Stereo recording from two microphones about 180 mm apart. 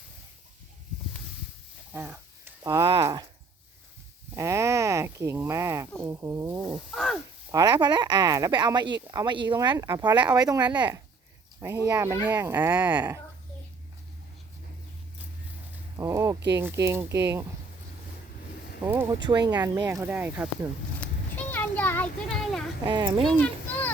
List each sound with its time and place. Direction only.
1.9 s speech: 10° right (ahead or behind)
4.4 s speech: 15° right (ahead or behind); by 7.2 s centre (ahead or behind)
7.5 s speech: 20° right (ahead or behind)
16.0 s speech: 15° right (ahead or behind)
18.9 s speech: 10° right (ahead or behind)
19.2 s speech: 25° right (ahead or behind)
21.0 s a sound: 10° left (ahead or behind)
22.8 s speech: 25° right (ahead or behind)
23.2 s a sound: 5° left (ahead or behind)